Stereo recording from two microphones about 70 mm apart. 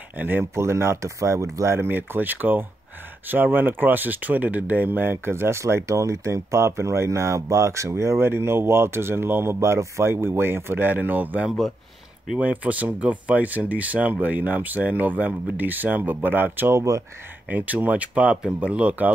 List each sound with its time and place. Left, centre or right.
0.1 s speech: right
0.6 s speech: right
1.8 s speech: right